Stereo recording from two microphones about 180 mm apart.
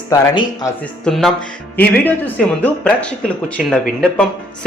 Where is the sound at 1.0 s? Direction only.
Centre (ahead or behind).